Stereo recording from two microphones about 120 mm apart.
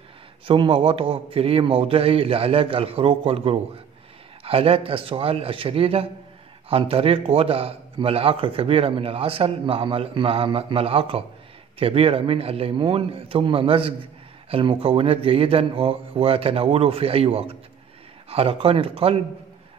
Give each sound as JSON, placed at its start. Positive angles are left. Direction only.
{"t": 0.5, "sound": "a man's voice", "side_deg": -50}